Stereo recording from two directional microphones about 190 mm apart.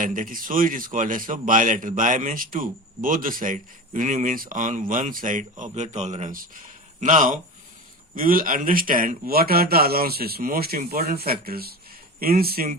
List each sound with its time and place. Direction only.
0.0 s a man's voice: 45° right (ahead or behind)